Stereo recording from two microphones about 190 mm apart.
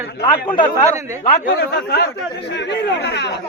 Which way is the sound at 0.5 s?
40° left (ahead or behind).